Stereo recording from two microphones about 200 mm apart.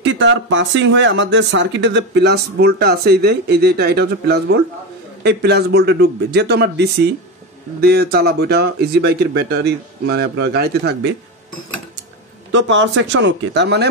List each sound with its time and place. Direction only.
0.0 s speech: 65° right (ahead or behind)
12.5 s speech: 65° right (ahead or behind)